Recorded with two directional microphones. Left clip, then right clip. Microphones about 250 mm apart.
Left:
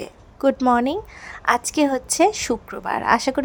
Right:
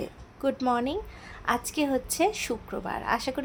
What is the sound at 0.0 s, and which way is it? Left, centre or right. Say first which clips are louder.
A woman's voice: left 9 dB; left.